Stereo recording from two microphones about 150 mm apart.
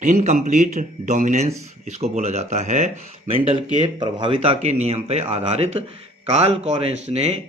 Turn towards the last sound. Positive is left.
turn(degrees=-45)  # may be behind; listen again after turning